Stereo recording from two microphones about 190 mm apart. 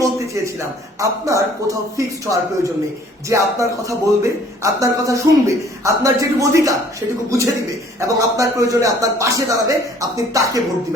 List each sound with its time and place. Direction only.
0.9 s speech: 15° right (ahead or behind)